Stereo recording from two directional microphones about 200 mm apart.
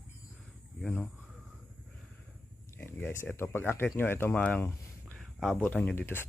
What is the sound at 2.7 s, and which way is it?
Speech, 10° left (ahead or behind).